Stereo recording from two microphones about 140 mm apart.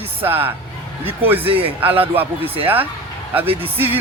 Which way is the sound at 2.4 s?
45° right (ahead or behind).